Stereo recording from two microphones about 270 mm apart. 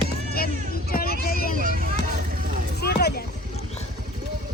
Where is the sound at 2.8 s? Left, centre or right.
Left.